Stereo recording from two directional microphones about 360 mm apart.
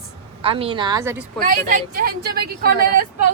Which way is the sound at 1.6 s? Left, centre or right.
Right.